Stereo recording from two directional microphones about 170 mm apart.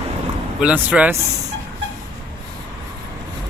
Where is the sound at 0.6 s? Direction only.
10° right (ahead or behind).